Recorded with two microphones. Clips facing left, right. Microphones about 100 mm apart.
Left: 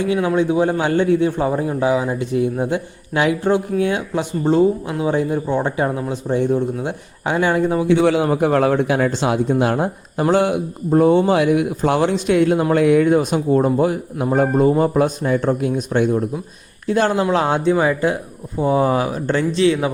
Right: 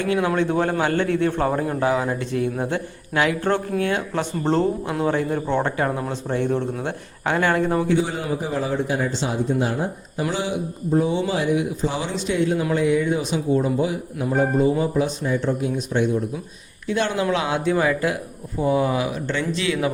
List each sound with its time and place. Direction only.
0.0 s a man's voice: 15° left (ahead or behind)
7.9 s a man's voice: 85° left; by 16.2 s 55° left (ahead or behind)
16.8 s speech: 45° left (ahead or behind)